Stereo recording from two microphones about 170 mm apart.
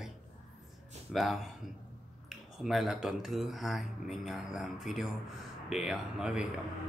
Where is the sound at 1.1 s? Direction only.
Centre (ahead or behind).